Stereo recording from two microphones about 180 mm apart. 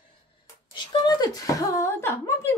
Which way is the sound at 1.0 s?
20° left (ahead or behind).